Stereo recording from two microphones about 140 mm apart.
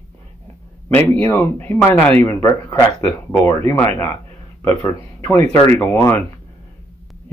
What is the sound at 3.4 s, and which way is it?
Speech, 20° left (ahead or behind).